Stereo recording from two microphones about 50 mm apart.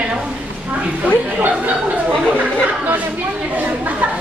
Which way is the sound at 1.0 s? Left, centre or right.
Right.